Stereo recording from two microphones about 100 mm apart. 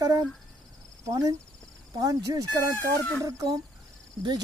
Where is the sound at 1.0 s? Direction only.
35° right (ahead or behind).